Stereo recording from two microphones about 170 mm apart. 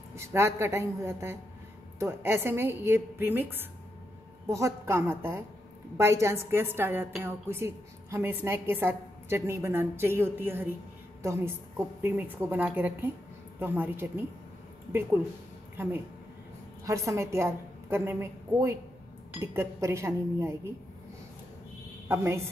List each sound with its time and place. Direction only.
0.1 s a woman's voice: 15° right (ahead or behind)
16.8 s a woman's voice: 20° right (ahead or behind)
22.0 s a woman's voice: 15° right (ahead or behind)